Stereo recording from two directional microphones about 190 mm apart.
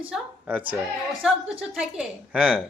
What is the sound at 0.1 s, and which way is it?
A woman's voice, 10° right (ahead or behind).